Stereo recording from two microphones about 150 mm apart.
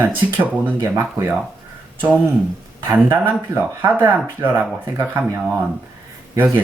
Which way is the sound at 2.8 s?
15° right (ahead or behind).